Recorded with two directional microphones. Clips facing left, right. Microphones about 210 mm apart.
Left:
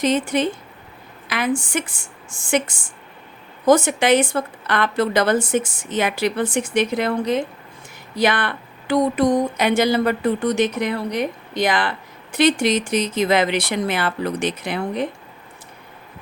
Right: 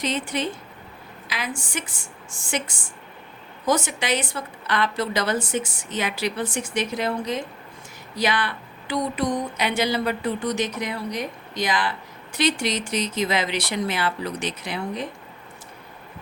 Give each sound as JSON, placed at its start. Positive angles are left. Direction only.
{"t": 0.0, "sound": "a woman's voice", "side_deg": 45}
{"t": 3.7, "sound": "speech", "side_deg": 50}